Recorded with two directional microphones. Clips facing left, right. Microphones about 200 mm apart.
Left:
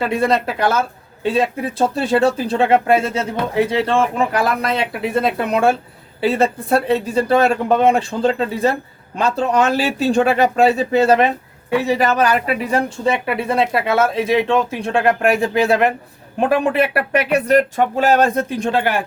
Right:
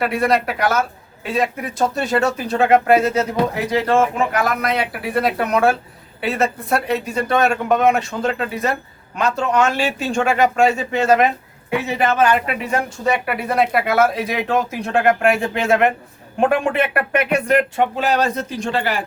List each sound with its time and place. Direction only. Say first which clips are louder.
0.0 s speech: left 1 dB; 25° left (ahead or behind); by 18.9 s 55° left (ahead or behind)